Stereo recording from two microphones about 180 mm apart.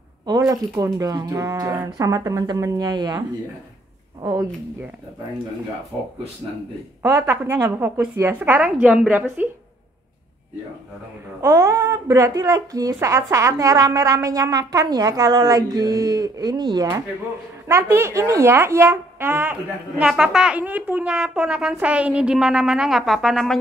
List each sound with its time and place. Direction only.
0.3 s speech: 20° right (ahead or behind)
7.0 s a woman's voice: 15° right (ahead or behind)
11.4 s a woman's voice: 15° right (ahead or behind); by 23.6 s centre (ahead or behind)